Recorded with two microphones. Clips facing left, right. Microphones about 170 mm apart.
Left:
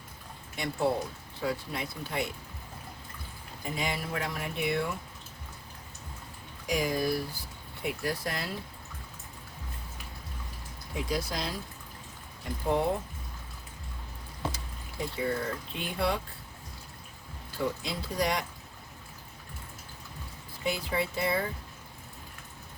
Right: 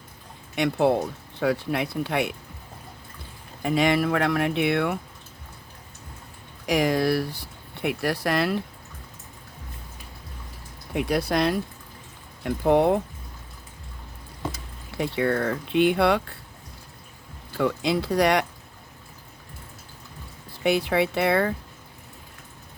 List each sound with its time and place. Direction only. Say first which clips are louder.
0.5 s speech: right 8 dB; 70° right (ahead or behind)
3.6 s speech: right 13 dB; 75° right (ahead or behind)
6.7 s speech: right 7 dB; 75° right (ahead or behind)
10.9 s speech: right 9 dB; 65° right (ahead or behind)
14.9 s speech: right 8 dB; 75° right (ahead or behind)
17.6 s speech: right 9 dB; 70° right (ahead or behind)
20.7 s speech: right 9 dB; 70° right (ahead or behind)